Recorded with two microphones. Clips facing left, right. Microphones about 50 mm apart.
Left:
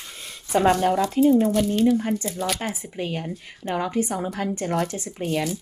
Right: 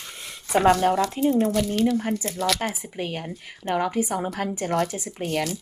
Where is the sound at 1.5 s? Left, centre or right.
Right.